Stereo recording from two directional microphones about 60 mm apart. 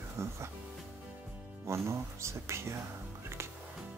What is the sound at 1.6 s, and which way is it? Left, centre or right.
Speech, right.